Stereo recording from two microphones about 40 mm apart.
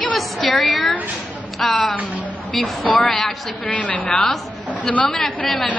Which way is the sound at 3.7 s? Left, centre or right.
Left.